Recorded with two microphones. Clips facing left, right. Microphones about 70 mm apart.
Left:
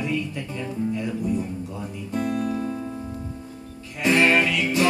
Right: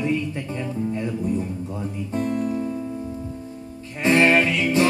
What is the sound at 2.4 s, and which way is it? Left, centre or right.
Music, left.